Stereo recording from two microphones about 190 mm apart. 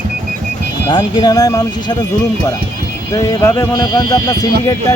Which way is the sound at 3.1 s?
20° left (ahead or behind).